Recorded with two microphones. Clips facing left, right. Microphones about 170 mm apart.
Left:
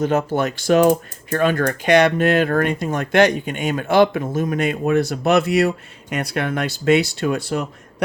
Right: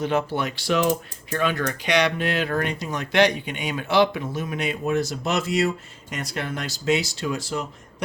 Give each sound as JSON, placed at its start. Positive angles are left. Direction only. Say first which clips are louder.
{"t": 0.0, "sound": "speech", "louder": "left 5 dB", "side_deg": 45}